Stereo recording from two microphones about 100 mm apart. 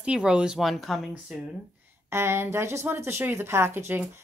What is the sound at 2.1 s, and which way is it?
Speech, 25° right (ahead or behind).